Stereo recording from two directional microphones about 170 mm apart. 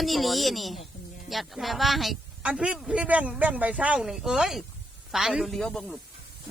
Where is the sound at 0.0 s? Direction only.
Centre (ahead or behind).